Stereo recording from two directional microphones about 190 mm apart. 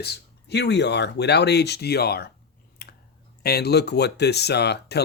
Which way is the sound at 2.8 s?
50° left (ahead or behind).